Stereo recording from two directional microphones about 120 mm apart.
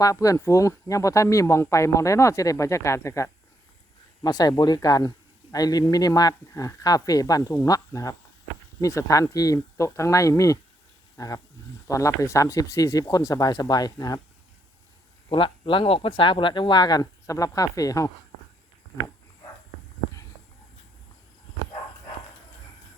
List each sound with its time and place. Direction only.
0.0 s speech: 30° left (ahead or behind)
15.3 s speech: 45° left (ahead or behind); by 18.1 s 30° left (ahead or behind)